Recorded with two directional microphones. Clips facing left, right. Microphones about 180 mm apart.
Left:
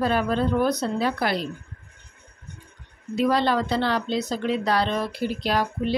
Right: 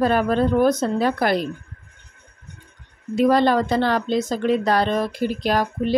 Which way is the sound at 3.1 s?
45° right (ahead or behind).